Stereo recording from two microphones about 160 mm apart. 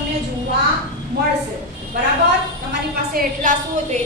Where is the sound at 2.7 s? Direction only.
65° right (ahead or behind).